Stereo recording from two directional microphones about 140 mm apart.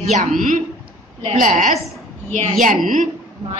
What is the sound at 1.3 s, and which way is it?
A woman's voice, 70° right (ahead or behind).